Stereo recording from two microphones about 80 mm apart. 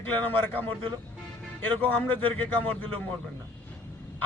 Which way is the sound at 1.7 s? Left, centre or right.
Centre.